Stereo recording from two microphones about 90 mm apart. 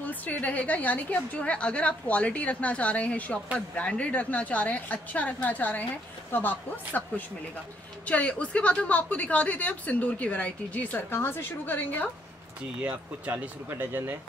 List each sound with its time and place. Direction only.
0.0 s a woman's voice: 20° left (ahead or behind)
12.8 s speech: 15° right (ahead or behind)